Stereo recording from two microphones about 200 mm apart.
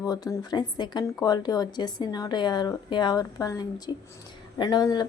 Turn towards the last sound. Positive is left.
turn(degrees=20)  # may be behind; listen again after turning